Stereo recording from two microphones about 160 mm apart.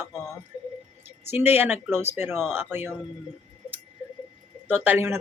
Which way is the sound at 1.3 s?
15° right (ahead or behind).